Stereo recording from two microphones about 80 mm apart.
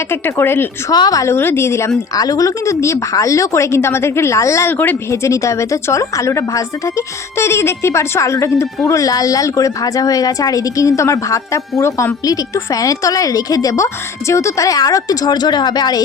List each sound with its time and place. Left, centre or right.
0.1 s speech: left
0.9 s a woman's voice: left
1.2 s speech: left
2.1 s speech: left
4.8 s a woman's voice: left
5.3 s a woman's voice: left